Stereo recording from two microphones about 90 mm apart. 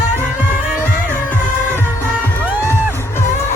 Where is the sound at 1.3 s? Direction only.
25° left (ahead or behind).